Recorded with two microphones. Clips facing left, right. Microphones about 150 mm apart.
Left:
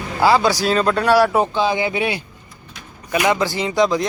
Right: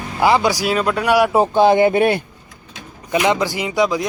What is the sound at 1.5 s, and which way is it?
Speech, 55° right (ahead or behind).